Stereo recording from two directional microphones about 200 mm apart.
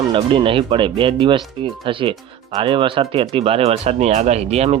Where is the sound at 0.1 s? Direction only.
25° right (ahead or behind).